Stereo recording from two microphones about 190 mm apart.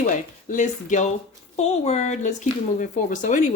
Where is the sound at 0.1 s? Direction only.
40° left (ahead or behind).